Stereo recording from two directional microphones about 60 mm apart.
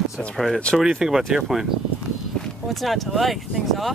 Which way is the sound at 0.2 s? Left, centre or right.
Centre.